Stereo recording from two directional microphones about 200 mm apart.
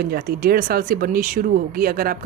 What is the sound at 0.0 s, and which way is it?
Speech, 50° right (ahead or behind).